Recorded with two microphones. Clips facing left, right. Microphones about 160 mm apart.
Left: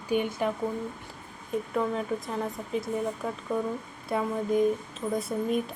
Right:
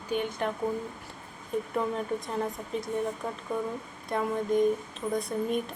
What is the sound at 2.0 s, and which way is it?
Speech, centre (ahead or behind).